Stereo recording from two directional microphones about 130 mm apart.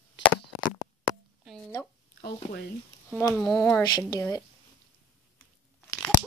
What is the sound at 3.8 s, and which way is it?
Speech, 30° left (ahead or behind).